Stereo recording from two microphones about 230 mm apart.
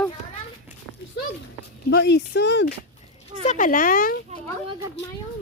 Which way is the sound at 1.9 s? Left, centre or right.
Left.